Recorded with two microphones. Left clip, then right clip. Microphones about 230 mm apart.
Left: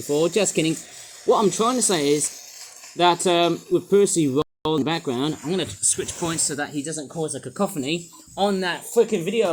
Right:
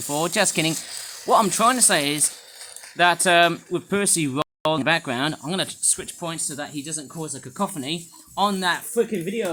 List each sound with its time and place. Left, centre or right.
0.1 s speech: right